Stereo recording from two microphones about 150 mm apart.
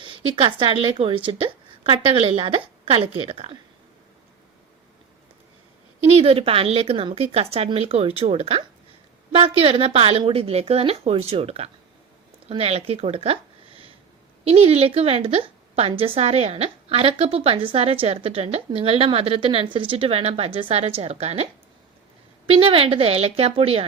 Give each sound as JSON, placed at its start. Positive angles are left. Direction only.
{"t": 0.0, "sound": "a woman's voice", "side_deg": -35}
{"t": 6.1, "sound": "a woman's voice", "side_deg": -40}
{"t": 22.4, "sound": "a woman's voice", "side_deg": -35}